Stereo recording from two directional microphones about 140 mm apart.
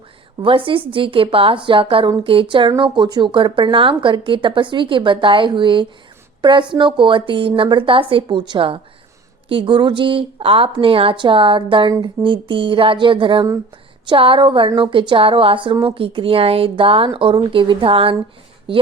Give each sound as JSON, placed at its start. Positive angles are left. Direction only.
{"t": 0.4, "sound": "a woman's voice", "side_deg": -40}